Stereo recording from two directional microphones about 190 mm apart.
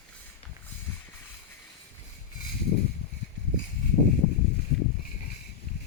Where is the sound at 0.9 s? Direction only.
10° left (ahead or behind).